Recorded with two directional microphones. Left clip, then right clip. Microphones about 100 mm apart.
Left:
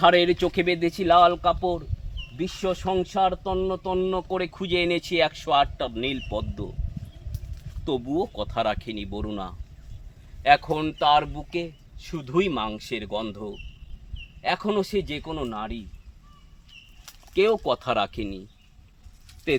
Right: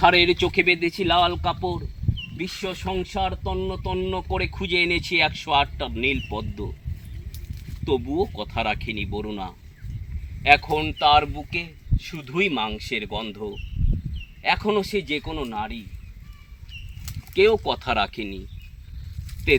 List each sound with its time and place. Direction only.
0.0 s speech: 35° left (ahead or behind)
7.9 s speech: 45° left (ahead or behind)
17.3 s speech: 45° left (ahead or behind)